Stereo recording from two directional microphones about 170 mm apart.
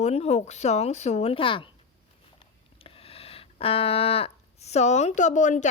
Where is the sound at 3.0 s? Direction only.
35° left (ahead or behind).